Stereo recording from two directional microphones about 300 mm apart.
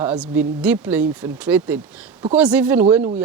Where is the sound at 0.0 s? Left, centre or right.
Centre.